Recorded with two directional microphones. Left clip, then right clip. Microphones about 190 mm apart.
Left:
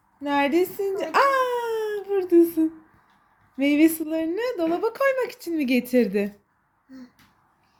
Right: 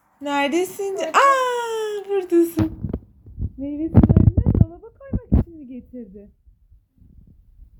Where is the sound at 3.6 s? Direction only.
15° left (ahead or behind).